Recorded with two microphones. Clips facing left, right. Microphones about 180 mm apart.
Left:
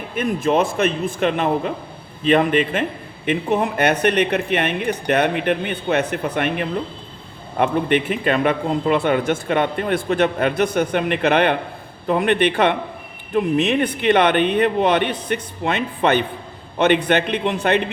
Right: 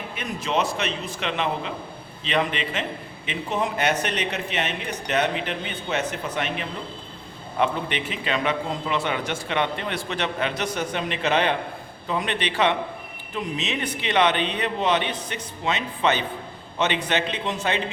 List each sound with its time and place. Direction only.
0.2 s a man's voice: 50° left (ahead or behind)